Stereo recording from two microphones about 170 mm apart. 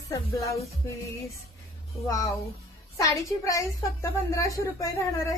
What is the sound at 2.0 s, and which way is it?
A woman's voice, 20° left (ahead or behind).